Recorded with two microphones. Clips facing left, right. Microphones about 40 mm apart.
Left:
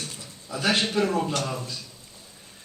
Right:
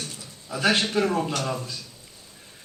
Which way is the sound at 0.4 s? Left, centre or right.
Centre.